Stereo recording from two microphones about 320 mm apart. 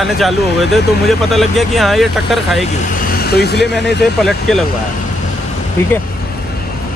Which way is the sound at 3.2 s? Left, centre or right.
Left.